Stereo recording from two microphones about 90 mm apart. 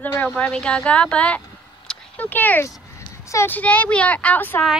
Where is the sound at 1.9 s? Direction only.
20° left (ahead or behind).